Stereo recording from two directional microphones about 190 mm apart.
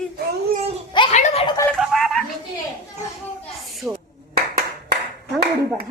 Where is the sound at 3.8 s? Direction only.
5° right (ahead or behind).